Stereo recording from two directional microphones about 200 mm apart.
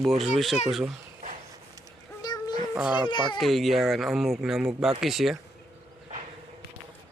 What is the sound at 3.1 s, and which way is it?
Speech, 25° left (ahead or behind).